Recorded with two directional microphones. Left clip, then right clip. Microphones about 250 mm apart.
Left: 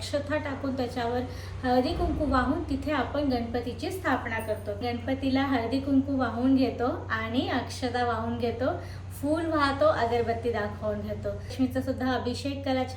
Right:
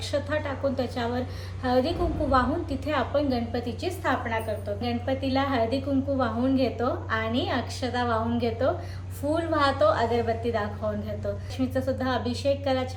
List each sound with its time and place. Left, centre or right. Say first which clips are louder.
0.1 s a woman's voice: right 2 dB; centre